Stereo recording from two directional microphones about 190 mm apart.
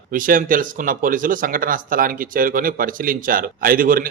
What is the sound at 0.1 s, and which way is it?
Speech, 45° right (ahead or behind).